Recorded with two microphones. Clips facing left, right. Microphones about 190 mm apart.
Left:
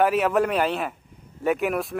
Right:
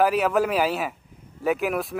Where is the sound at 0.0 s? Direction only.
Centre (ahead or behind).